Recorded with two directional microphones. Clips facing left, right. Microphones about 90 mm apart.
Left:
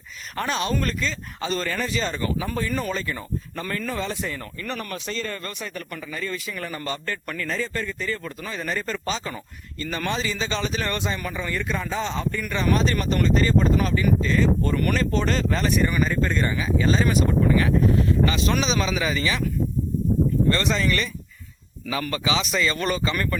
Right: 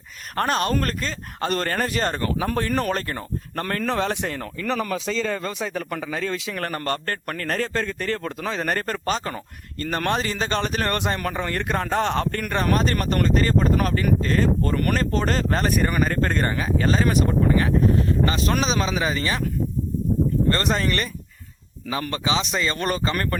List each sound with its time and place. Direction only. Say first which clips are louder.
0.3 s speech: right 3 dB; 50° right (ahead or behind)
20.5 s speech: even; 40° right (ahead or behind)
21.8 s speech: even; 35° right (ahead or behind)